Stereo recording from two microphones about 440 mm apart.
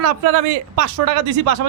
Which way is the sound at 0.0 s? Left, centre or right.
Right.